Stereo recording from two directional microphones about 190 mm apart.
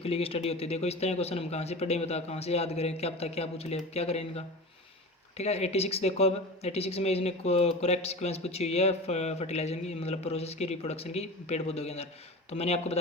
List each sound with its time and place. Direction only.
0.0 s speech: 30° left (ahead or behind)